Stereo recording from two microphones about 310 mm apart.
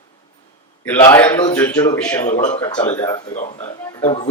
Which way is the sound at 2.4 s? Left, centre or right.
Centre.